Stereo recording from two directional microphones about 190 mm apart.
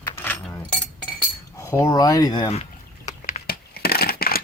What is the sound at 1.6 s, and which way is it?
Speech, 15° left (ahead or behind).